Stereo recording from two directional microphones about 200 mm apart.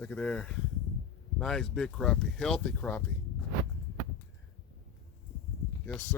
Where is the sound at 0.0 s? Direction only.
5° left (ahead or behind).